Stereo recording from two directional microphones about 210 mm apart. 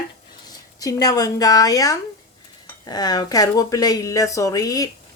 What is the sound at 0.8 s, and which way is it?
Speech, 15° left (ahead or behind).